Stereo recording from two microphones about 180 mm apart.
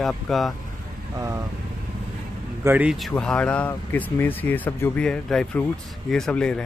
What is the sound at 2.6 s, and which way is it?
Speech, 10° right (ahead or behind).